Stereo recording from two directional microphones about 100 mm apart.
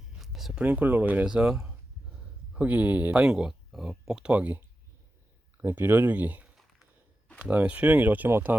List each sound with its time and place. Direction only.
0.2 s a sound: centre (ahead or behind)
0.6 s speech: 15° right (ahead or behind)
5.6 s speech: 20° right (ahead or behind)